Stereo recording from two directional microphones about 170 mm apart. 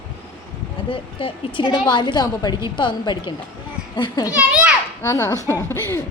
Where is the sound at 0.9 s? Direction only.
30° left (ahead or behind).